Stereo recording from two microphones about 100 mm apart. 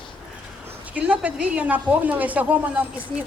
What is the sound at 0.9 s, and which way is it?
Speech, 15° right (ahead or behind).